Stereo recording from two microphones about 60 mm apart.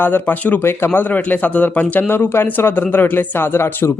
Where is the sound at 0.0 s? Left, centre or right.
Left.